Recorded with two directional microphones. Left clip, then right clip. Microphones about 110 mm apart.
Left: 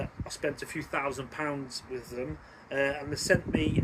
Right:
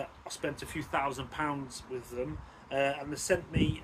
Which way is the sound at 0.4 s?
25° right (ahead or behind).